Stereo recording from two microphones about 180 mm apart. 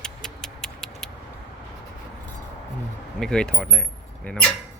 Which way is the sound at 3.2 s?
5° left (ahead or behind).